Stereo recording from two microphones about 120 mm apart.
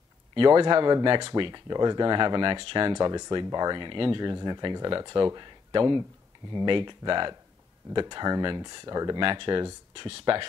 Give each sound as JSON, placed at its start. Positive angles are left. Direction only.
{"t": 0.3, "sound": "speech", "side_deg": -40}